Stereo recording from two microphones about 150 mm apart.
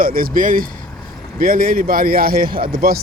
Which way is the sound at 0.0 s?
70° right (ahead or behind).